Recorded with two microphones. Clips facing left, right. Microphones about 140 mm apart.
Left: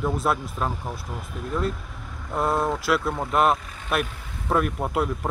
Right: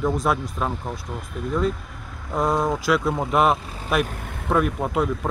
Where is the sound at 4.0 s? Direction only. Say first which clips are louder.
Right 4 dB; 50° right (ahead or behind).